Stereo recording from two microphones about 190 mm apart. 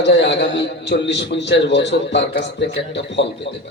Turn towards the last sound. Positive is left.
turn(degrees=65)  # may be behind; listen again after turning